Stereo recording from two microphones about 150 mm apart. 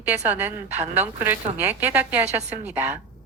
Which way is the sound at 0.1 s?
15° right (ahead or behind).